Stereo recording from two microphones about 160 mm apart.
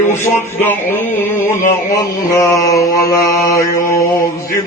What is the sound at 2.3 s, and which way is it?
Mantra, 20° left (ahead or behind).